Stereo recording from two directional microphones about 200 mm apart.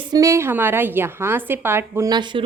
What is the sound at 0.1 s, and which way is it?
A woman's voice, 15° right (ahead or behind).